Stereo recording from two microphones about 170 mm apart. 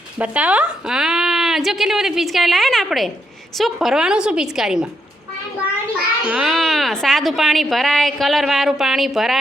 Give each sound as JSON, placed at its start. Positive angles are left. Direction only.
{"t": 0.2, "sound": "a woman's voice", "side_deg": -5}
{"t": 6.2, "sound": "a woman's voice", "side_deg": -5}